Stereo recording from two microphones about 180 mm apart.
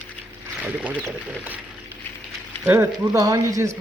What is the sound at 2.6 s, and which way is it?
Speech, 15° right (ahead or behind).